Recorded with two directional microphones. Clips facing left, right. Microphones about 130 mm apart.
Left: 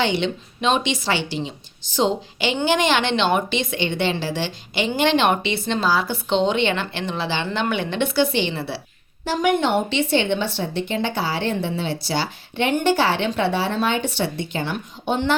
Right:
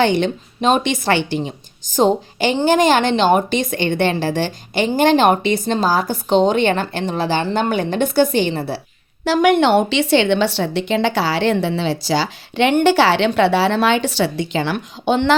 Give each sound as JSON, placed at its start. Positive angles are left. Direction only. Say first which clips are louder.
{"t": 0.0, "sound": "a woman's voice", "louder": "right 5 dB", "side_deg": -50}
{"t": 9.2, "sound": "a woman's voice", "louder": "right 6 dB", "side_deg": -85}